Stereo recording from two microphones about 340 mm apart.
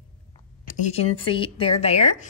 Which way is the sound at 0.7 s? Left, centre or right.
Left.